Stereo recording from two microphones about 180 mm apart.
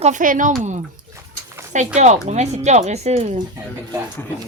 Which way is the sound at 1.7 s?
40° right (ahead or behind).